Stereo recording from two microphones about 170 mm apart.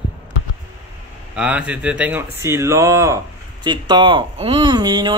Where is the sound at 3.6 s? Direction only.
25° right (ahead or behind).